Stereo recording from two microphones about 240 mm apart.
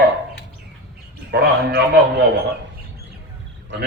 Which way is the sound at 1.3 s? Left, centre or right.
Right.